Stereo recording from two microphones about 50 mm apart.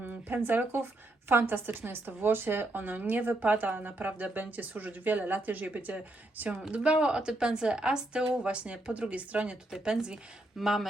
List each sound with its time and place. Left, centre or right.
0.3 s a woman's voice: right
9.6 s speech: centre